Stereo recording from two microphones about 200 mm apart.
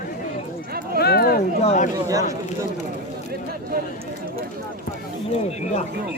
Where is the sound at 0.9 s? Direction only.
50° left (ahead or behind).